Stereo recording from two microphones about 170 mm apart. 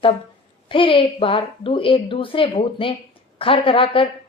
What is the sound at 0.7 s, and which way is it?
A woman's voice, 30° left (ahead or behind).